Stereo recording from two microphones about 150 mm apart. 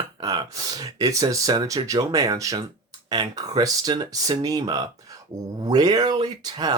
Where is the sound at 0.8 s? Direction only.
25° right (ahead or behind).